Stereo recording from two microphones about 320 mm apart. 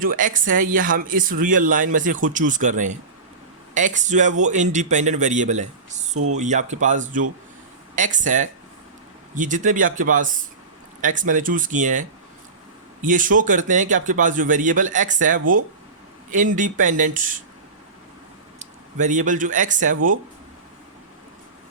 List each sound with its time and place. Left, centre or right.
0.0 s speech: right
18.6 s speech: right